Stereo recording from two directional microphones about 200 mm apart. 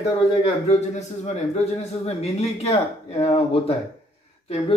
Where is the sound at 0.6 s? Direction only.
35° left (ahead or behind).